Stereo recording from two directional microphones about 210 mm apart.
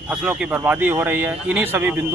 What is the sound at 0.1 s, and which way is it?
Speech, 5° right (ahead or behind).